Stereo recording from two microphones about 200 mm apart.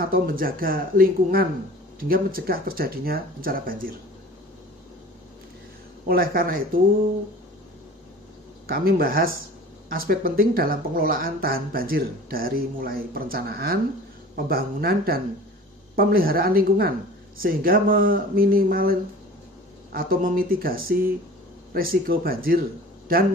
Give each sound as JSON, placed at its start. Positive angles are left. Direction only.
{"t": 0.0, "sound": "speech", "side_deg": -45}
{"t": 6.0, "sound": "speech", "side_deg": -45}
{"t": 8.6, "sound": "speech", "side_deg": -45}